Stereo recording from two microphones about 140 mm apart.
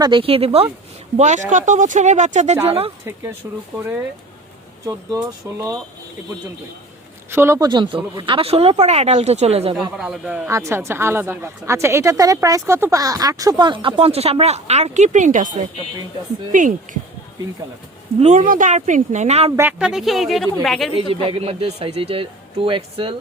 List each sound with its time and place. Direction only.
0.0 s speech: 40° right (ahead or behind)
1.1 s speech: 55° right (ahead or behind)
2.6 s speech: 45° right (ahead or behind)
3.4 s speech: 15° right (ahead or behind)
4.9 s speech: 25° right (ahead or behind)
7.3 s speech: 15° right (ahead or behind)
7.7 s speech: 35° right (ahead or behind)
10.0 s speech: 5° right (ahead or behind)
10.5 s speech: 20° right (ahead or behind); by 17.0 s 70° right (ahead or behind)
18.2 s speech: 55° right (ahead or behind)
18.4 s speech: 70° right (ahead or behind); by 19.5 s 55° right (ahead or behind)
19.8 s a woman's voice: 5° right (ahead or behind)
20.9 s speech: 40° right (ahead or behind)